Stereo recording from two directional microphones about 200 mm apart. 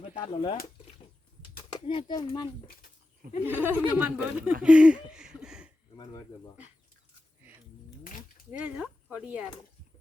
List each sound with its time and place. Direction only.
0.0 s speech: 30° left (ahead or behind)
1.7 s speech: 25° left (ahead or behind)
3.4 s speech: 10° right (ahead or behind)
4.6 s a sound: 5° right (ahead or behind)
8.4 s speech: 5° right (ahead or behind)